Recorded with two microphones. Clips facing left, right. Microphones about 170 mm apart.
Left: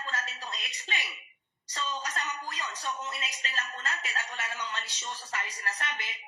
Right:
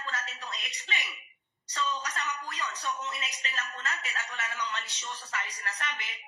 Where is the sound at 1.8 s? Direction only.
30° left (ahead or behind).